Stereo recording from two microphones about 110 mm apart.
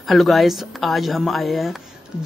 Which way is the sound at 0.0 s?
Centre (ahead or behind).